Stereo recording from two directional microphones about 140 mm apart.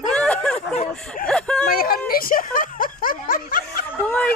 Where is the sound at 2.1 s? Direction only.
90° left.